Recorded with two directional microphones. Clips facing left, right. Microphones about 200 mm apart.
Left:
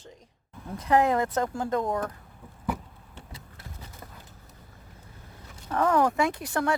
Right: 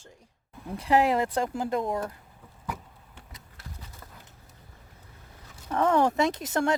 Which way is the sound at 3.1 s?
30° left (ahead or behind).